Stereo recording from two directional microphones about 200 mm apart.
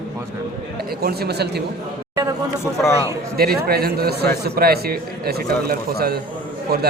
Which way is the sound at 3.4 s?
50° right (ahead or behind).